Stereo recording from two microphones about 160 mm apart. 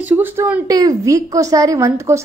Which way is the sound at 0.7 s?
25° right (ahead or behind).